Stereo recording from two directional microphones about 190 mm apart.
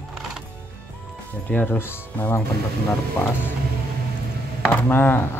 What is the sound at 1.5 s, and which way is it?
Speech, 10° left (ahead or behind).